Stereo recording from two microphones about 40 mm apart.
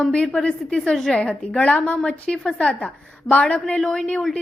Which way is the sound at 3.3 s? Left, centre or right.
Left.